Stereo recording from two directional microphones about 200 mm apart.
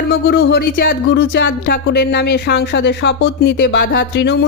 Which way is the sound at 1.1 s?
60° left (ahead or behind).